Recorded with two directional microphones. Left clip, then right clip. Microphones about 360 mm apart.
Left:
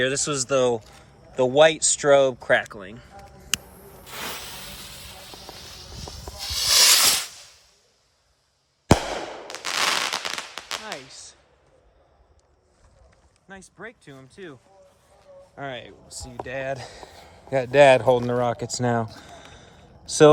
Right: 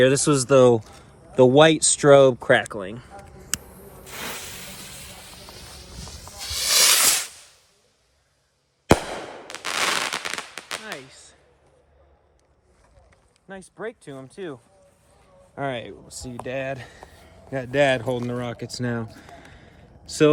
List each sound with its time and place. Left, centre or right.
0.0 s speech: centre
2.3 s speech: right
2.6 s a sound: centre
4.0 s a sound: centre
9.5 s firecracker: centre
13.5 s speech: centre
16.7 s speech: centre